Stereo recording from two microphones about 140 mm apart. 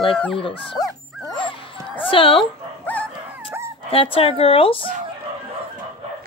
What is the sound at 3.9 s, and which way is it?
Speech, 40° left (ahead or behind).